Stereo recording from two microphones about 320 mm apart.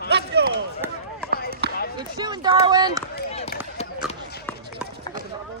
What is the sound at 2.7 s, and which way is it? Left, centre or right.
Run, centre.